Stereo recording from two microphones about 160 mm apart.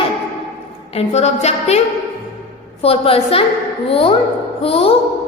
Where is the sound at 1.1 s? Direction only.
45° left (ahead or behind).